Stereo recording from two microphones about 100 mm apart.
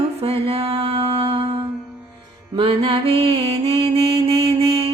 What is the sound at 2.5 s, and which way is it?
Mantra, 60° right (ahead or behind).